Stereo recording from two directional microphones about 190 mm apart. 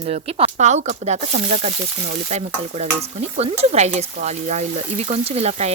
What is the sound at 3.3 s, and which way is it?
Speech, 35° right (ahead or behind).